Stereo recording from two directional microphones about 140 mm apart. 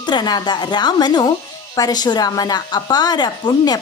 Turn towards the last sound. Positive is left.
turn(degrees=30)  # may be behind; listen again after turning